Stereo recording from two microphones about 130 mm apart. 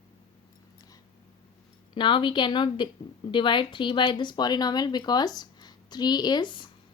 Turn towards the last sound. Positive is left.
turn(degrees=40)  # may be behind; listen again after turning